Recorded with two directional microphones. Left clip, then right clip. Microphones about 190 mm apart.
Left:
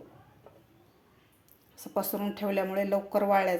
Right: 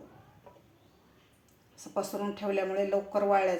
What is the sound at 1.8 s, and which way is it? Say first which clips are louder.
Speech: left 1 dB; 45° left (ahead or behind).